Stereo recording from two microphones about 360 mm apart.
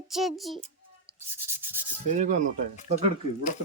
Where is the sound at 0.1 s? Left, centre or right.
Centre.